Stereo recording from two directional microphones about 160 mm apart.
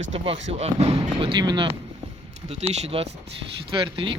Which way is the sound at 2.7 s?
40° right (ahead or behind).